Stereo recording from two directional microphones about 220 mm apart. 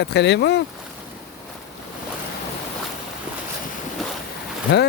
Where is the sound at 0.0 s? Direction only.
50° left (ahead or behind).